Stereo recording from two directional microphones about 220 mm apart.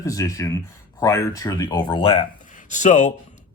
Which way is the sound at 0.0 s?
15° left (ahead or behind).